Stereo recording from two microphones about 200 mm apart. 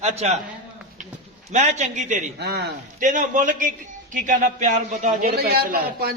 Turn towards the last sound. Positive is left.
turn(degrees=-50)  # may be behind; listen again after turning